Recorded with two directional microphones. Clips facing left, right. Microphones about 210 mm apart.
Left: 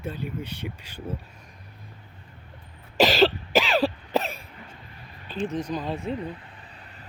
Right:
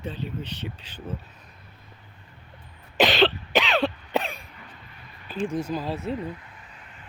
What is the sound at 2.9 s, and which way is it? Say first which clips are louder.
Cough: left 1 dB; centre (ahead or behind).